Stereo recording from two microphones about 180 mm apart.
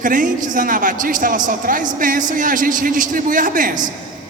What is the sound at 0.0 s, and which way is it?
A man's voice, 45° right (ahead or behind).